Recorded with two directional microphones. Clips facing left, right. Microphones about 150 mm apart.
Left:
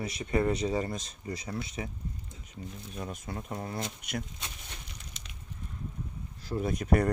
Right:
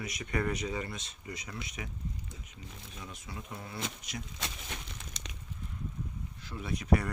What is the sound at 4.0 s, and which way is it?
Speech, 60° left (ahead or behind).